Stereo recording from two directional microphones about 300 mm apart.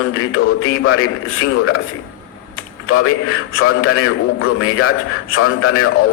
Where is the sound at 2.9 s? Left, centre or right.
Left.